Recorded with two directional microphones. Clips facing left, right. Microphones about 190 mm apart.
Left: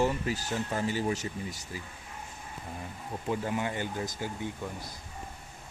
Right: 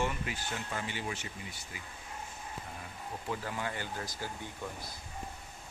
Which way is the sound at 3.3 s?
20° left (ahead or behind).